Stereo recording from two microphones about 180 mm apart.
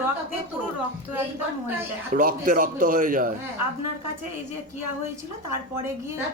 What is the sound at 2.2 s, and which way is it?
A man's voice, 50° right (ahead or behind).